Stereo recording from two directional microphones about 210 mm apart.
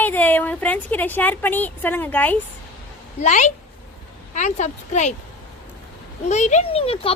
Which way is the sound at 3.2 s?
35° left (ahead or behind).